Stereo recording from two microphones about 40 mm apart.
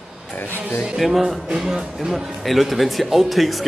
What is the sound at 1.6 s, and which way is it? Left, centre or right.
Speech, centre.